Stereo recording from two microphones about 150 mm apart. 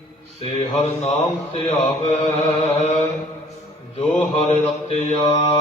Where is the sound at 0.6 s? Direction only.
45° left (ahead or behind).